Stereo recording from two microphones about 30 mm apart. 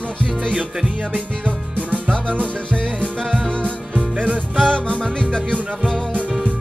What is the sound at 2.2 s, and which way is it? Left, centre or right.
Music, left.